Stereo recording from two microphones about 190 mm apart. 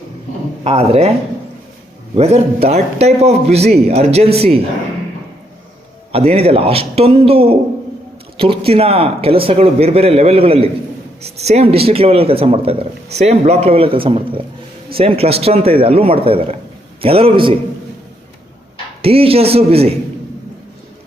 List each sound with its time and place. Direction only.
0.6 s speech: 30° right (ahead or behind)
2.1 s speech: 35° right (ahead or behind)
6.1 s a man's voice: 30° right (ahead or behind)
19.0 s speech: 30° right (ahead or behind)